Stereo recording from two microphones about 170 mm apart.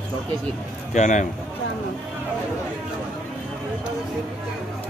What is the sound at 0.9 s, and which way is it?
Speech, 45° left (ahead or behind).